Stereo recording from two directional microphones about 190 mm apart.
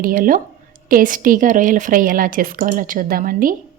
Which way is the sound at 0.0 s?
45° right (ahead or behind).